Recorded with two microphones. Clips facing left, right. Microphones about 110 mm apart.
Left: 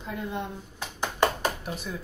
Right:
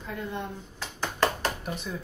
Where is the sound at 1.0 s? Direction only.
15° left (ahead or behind).